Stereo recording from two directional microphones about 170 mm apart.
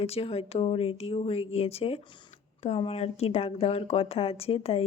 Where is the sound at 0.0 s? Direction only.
35° left (ahead or behind).